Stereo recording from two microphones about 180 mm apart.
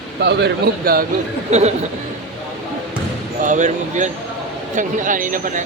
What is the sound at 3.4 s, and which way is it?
Speech, 45° right (ahead or behind).